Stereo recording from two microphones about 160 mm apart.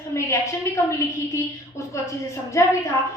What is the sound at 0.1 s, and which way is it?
A woman's voice, 20° left (ahead or behind).